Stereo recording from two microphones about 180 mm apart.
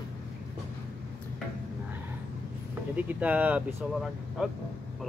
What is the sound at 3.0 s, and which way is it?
Speech, 10° right (ahead or behind).